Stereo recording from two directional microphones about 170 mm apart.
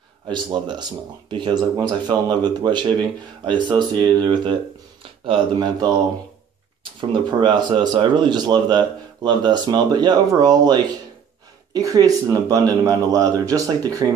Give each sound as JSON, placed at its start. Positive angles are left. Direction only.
{"t": 0.3, "sound": "speech", "side_deg": -25}